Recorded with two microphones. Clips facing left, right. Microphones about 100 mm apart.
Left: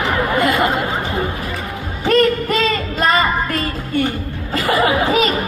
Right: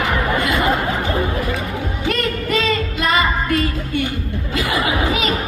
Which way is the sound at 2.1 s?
40° left (ahead or behind).